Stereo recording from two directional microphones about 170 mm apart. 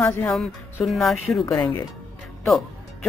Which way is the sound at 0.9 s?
Centre (ahead or behind).